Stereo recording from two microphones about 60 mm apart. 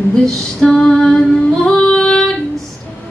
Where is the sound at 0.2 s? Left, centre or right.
Centre.